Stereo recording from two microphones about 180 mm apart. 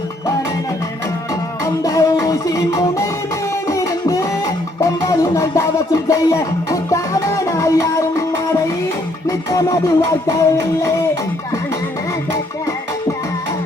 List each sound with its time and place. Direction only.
1.6 s music: 20° left (ahead or behind)
9.2 s music: 20° left (ahead or behind)